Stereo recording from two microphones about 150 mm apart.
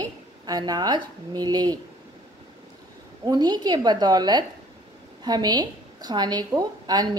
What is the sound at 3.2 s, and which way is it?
A woman's voice, 30° right (ahead or behind).